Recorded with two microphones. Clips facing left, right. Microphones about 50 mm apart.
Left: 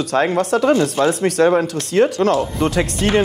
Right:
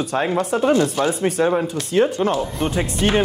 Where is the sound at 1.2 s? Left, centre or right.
Left.